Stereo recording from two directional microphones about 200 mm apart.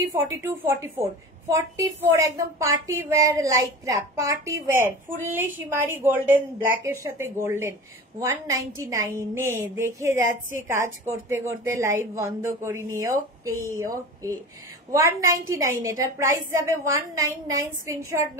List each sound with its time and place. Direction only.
0.1 s a woman's voice: 10° right (ahead or behind)